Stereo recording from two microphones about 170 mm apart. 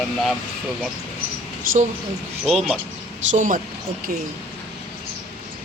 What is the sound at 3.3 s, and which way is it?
Speech, 50° right (ahead or behind).